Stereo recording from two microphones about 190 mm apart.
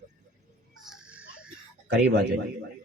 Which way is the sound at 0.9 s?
5° right (ahead or behind).